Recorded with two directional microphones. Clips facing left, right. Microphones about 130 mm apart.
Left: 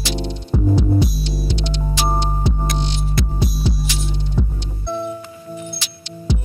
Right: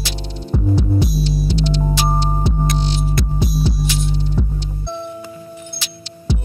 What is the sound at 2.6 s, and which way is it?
Music, centre (ahead or behind).